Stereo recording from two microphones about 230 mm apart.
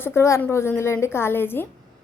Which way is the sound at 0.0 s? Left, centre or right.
Centre.